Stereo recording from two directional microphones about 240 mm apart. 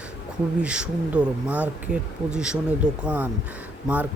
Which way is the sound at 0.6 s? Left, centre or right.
Centre.